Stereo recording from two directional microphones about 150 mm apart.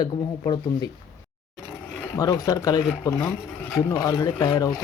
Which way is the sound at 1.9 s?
10° left (ahead or behind).